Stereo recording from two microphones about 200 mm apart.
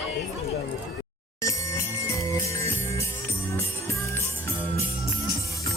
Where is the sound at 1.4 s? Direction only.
15° left (ahead or behind).